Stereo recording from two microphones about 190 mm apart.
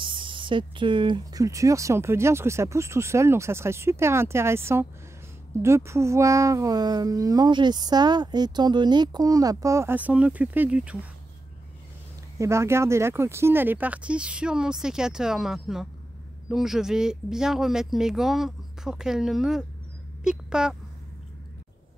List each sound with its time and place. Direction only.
0.0 s speech: 25° right (ahead or behind); by 11.0 s 5° right (ahead or behind)
12.4 s speech: 15° right (ahead or behind)